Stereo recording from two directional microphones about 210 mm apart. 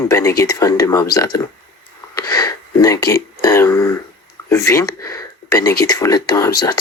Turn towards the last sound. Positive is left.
turn(degrees=20)  # may be behind; listen again after turning